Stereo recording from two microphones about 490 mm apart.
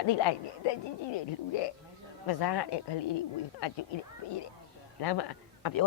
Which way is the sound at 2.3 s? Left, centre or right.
Left.